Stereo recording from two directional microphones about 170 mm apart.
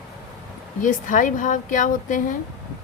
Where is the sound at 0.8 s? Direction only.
50° left (ahead or behind).